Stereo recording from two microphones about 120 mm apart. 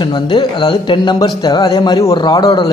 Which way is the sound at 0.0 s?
40° left (ahead or behind).